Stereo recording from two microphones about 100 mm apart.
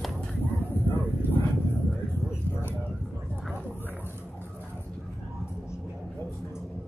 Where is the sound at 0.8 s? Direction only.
20° left (ahead or behind).